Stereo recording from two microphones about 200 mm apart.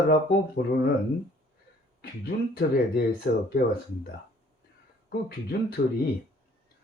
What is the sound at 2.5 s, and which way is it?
Speech, 50° left (ahead or behind).